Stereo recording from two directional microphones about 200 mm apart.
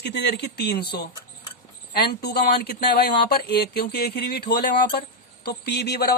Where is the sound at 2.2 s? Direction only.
55° left (ahead or behind).